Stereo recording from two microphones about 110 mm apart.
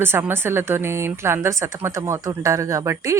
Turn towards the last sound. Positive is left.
turn(degrees=-30)  # may be behind; listen again after turning